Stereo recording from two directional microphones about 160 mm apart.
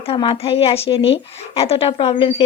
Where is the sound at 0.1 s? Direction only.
35° left (ahead or behind).